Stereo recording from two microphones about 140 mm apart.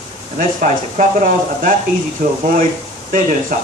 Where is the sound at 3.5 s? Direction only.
80° right.